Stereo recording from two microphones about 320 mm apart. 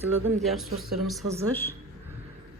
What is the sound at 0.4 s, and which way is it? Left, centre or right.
Speech, centre.